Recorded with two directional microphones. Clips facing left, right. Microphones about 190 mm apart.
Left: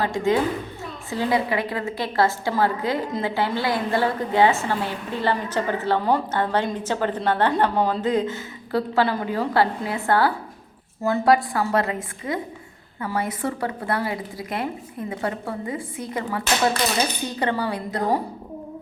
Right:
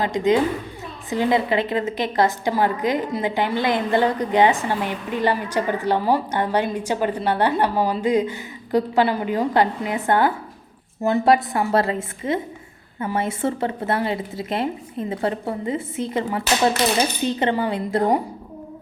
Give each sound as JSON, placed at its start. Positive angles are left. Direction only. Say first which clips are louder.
{"t": 0.0, "sound": "a woman's voice", "louder": "right 2 dB", "side_deg": -20}